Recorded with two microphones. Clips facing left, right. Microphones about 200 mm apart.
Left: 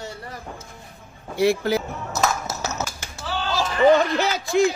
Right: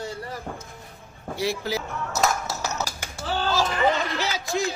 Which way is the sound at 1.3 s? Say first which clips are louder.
Left 7 dB; 55° left (ahead or behind).